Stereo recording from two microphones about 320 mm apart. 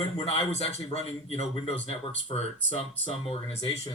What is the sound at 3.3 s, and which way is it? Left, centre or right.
Speech, centre.